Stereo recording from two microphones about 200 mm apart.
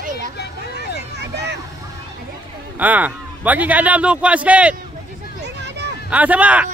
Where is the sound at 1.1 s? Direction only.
55° right (ahead or behind).